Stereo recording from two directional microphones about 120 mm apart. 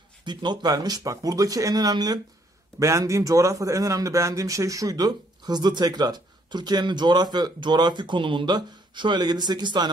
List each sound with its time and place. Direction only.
0.2 s speech: 40° right (ahead or behind)